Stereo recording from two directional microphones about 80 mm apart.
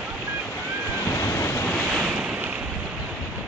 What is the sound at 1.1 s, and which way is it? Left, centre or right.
Waves, left.